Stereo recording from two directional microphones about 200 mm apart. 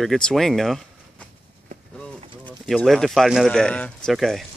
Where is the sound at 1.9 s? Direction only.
5° left (ahead or behind).